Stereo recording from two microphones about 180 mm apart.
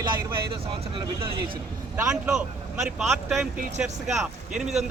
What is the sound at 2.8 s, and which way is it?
Speech, centre (ahead or behind).